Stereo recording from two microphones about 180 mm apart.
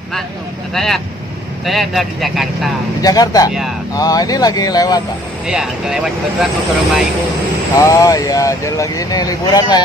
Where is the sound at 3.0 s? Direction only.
20° left (ahead or behind).